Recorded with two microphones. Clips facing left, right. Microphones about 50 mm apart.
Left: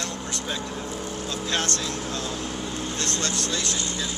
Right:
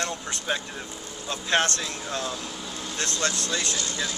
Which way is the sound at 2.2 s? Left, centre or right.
Left.